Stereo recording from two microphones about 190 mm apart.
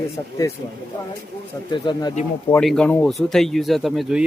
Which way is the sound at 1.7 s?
25° left (ahead or behind).